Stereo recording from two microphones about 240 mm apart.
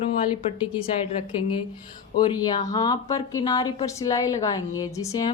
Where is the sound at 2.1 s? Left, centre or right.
Centre.